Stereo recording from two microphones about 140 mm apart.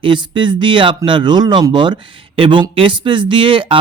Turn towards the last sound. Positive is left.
turn(degrees=-35)  # may be behind; listen again after turning